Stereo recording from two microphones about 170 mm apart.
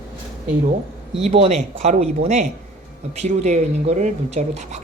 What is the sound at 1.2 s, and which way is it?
Speech, 35° right (ahead or behind).